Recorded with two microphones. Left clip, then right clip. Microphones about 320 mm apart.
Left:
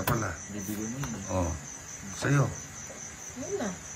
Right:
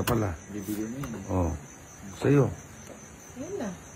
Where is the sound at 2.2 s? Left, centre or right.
Centre.